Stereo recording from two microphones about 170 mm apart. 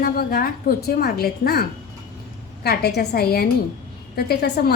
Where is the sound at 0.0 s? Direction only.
65° left (ahead or behind).